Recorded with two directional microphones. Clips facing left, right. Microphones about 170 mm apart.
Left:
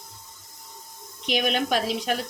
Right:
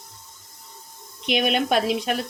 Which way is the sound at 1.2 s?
60° right (ahead or behind).